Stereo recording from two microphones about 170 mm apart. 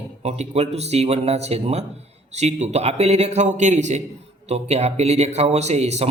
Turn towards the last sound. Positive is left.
turn(degrees=-40)  # may be behind; listen again after turning